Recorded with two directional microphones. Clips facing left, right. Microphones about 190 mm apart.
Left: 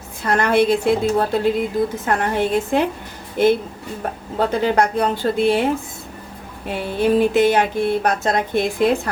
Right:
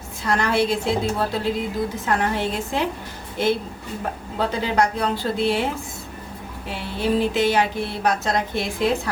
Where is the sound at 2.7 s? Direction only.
55° left (ahead or behind).